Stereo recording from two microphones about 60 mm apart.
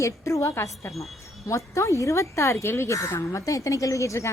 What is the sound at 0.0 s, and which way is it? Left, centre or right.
Speech, left.